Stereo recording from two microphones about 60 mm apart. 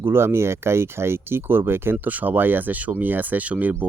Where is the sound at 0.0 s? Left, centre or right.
Right.